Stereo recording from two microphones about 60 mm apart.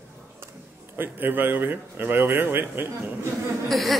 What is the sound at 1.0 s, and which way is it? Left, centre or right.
Speech, right.